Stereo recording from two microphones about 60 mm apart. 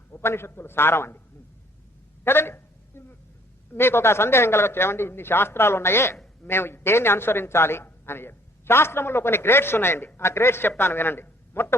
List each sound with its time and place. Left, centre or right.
0.1 s a woman's voice: left
2.2 s a sound: left
3.7 s a man's voice: left